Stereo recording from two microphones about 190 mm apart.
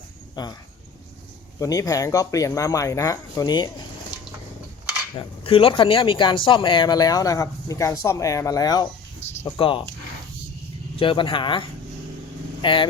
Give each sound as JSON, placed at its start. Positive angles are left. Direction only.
{"t": 0.4, "sound": "speech", "side_deg": 25}
{"t": 1.5, "sound": "speech", "side_deg": 15}
{"t": 5.1, "sound": "speech", "side_deg": 30}
{"t": 9.2, "sound": "speech", "side_deg": 30}
{"t": 10.9, "sound": "speech", "side_deg": 25}